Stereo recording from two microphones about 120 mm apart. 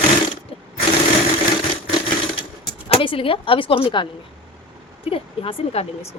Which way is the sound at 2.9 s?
50° left (ahead or behind).